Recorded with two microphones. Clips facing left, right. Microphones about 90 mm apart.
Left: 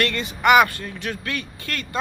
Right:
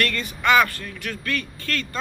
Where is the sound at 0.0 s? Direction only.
20° left (ahead or behind).